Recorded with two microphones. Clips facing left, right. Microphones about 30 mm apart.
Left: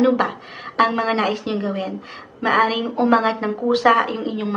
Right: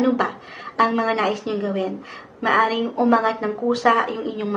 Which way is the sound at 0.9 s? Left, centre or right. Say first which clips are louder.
Even; left.